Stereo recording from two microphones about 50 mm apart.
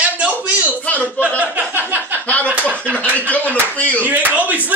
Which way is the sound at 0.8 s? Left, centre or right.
Left.